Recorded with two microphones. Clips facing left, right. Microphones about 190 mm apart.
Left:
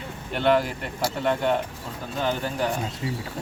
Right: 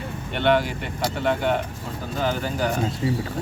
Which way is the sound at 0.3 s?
Centre (ahead or behind).